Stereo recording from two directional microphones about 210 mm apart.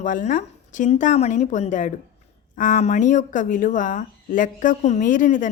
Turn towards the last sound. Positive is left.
turn(degrees=35)  # may be behind; listen again after turning